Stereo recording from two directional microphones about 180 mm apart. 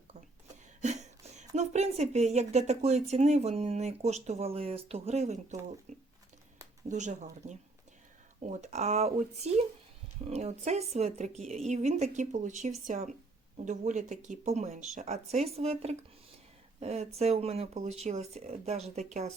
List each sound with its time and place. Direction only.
0.8 s a woman's voice: 40° right (ahead or behind)
6.8 s a woman's voice: 40° right (ahead or behind)